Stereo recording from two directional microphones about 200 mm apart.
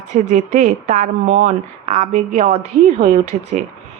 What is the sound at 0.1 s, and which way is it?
A woman's voice, 35° right (ahead or behind).